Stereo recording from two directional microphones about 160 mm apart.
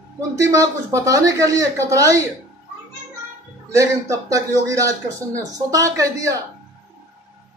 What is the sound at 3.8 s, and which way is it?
Speech, 20° right (ahead or behind).